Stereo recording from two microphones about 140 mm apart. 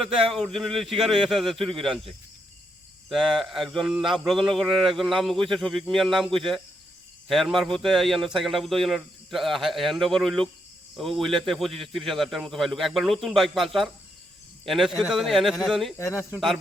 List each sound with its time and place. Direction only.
0.0 s a man's voice: centre (ahead or behind)
16.0 s speech: 20° left (ahead or behind)